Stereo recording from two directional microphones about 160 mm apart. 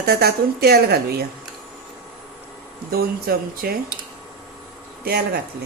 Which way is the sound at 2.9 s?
70° right (ahead or behind).